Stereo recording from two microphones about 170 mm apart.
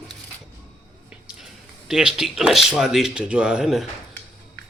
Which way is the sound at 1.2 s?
5° right (ahead or behind).